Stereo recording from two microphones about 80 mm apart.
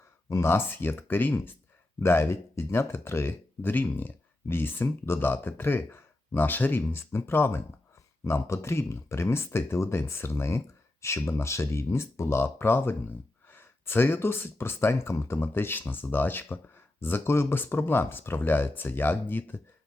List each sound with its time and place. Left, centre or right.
0.3 s speech: left